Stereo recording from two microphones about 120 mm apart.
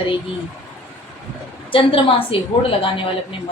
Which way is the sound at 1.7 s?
45° left (ahead or behind).